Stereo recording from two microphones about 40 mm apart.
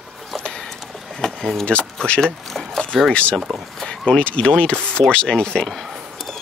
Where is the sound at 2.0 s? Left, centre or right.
Left.